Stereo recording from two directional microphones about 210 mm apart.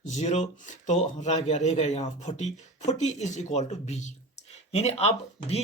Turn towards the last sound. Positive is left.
turn(degrees=30)  # may be behind; listen again after turning